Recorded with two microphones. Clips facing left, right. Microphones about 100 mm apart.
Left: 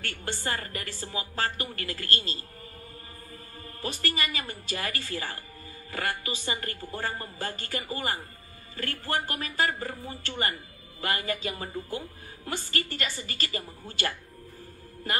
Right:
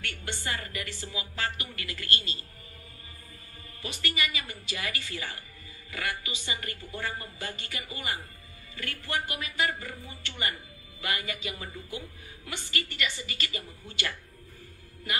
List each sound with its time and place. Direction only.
0.0 s a woman's voice: 40° left (ahead or behind)
3.8 s a woman's voice: 40° left (ahead or behind)